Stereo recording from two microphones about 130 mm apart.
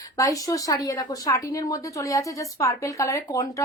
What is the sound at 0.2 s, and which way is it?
Speech, 25° left (ahead or behind).